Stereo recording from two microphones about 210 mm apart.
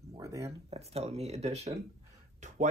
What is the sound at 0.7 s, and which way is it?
Speech, 30° right (ahead or behind).